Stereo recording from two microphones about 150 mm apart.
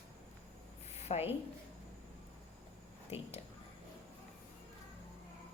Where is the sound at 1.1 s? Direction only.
40° left (ahead or behind).